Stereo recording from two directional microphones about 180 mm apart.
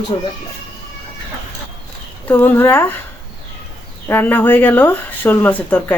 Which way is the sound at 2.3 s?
10° left (ahead or behind).